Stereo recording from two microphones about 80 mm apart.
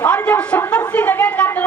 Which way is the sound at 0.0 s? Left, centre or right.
Centre.